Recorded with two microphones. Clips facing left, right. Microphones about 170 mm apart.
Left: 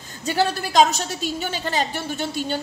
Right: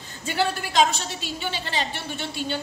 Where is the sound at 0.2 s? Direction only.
40° left (ahead or behind).